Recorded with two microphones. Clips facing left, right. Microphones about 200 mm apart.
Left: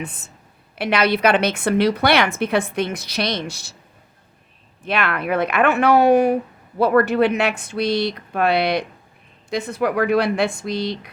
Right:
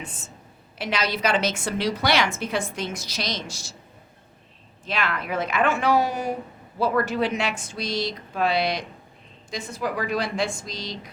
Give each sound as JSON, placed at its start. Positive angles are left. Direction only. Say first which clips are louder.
{"t": 0.0, "sound": "a woman's voice", "louder": "left 6 dB", "side_deg": 60}
{"t": 4.9, "sound": "a woman's voice", "louder": "left 6 dB", "side_deg": 60}